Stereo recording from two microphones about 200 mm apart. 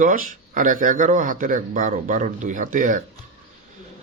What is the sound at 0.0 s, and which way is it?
Speech, 40° right (ahead or behind).